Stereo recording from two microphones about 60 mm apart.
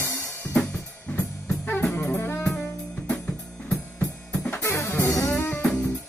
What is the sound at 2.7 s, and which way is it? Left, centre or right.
Music, centre.